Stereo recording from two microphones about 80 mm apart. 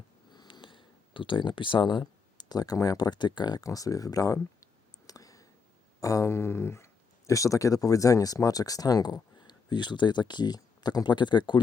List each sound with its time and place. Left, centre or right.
0.3 s speech: left
3.6 s speech: left
4.6 s a sound: left
6.0 s speech: left